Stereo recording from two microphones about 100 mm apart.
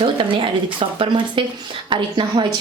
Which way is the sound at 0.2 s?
60° right (ahead or behind).